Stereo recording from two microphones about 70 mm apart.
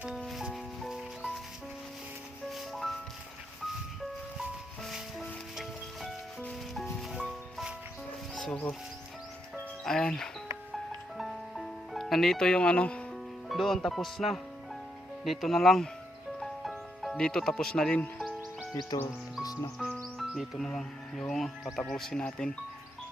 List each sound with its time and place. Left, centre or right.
0.2 s music: centre
0.9 s music: centre
2.5 s music: centre
4.8 s music: centre
9.8 s speech: centre
11.2 s music: centre
13.5 s speech: centre
16.4 s music: centre
17.2 s speech: centre
18.9 s speech: left
19.8 s music: centre
20.7 s speech: centre